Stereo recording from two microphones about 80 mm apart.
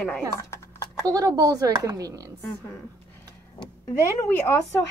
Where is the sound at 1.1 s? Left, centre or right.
Right.